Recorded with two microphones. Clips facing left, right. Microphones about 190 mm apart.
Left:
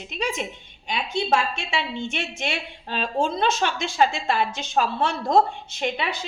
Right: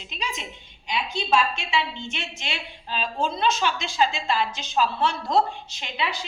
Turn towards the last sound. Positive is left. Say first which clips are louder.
# left 4 dB
turn(degrees=50)  # may be behind; listen again after turning